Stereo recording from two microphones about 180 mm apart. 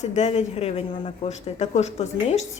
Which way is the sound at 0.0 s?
40° left (ahead or behind).